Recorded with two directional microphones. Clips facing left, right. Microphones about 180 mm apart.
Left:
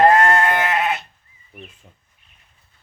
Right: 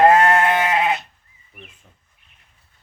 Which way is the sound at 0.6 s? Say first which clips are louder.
Right 1 dB; 15° right (ahead or behind).